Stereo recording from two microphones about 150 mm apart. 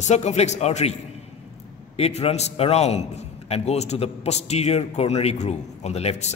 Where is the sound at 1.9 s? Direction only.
45° left (ahead or behind).